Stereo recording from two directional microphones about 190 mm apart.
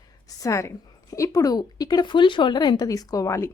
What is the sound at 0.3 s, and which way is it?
A woman's voice, 20° left (ahead or behind).